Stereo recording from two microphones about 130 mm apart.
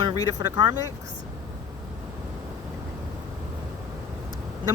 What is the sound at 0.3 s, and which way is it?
Speech, 30° right (ahead or behind).